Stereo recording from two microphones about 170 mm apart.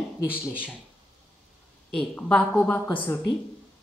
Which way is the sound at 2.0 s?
5° left (ahead or behind).